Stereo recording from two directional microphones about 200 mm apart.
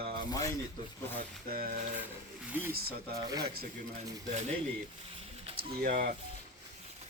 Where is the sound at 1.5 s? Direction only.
45° right (ahead or behind).